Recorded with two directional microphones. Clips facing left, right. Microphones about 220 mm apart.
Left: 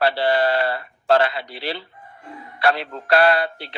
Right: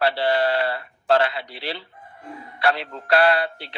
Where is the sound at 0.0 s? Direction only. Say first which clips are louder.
Left 2 dB; 45° left (ahead or behind).